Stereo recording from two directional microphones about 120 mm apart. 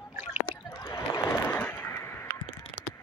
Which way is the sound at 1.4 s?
15° left (ahead or behind).